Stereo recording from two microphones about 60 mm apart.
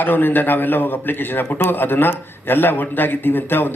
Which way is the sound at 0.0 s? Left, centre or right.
Left.